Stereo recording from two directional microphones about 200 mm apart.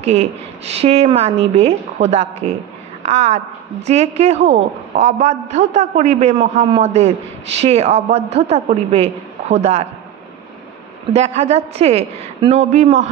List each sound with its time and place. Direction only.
0.0 s a woman's voice: 30° right (ahead or behind)
11.1 s a woman's voice: 30° right (ahead or behind)